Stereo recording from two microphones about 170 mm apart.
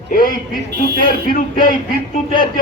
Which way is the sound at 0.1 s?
55° left (ahead or behind).